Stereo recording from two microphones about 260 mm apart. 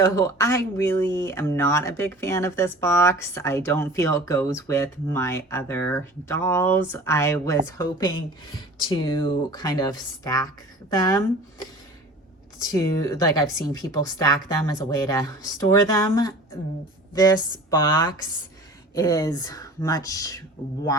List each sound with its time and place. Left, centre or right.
0.0 s speech: centre
12.6 s speech: centre